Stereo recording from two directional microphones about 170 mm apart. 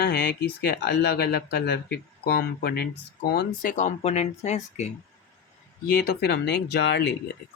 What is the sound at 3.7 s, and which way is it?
Speech, 45° left (ahead or behind).